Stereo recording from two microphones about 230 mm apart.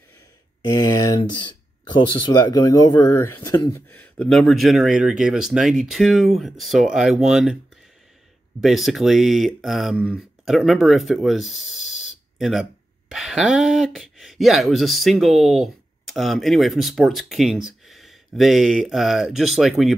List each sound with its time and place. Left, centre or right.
0.7 s speech: centre
8.5 s speech: centre